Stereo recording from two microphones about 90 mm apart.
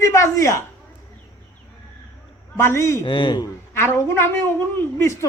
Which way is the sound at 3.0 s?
65° left (ahead or behind).